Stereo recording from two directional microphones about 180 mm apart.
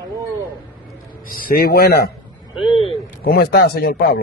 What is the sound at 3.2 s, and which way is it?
Speech, 55° left (ahead or behind).